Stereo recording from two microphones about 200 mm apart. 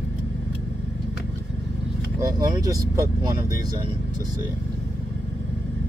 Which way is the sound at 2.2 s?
20° right (ahead or behind).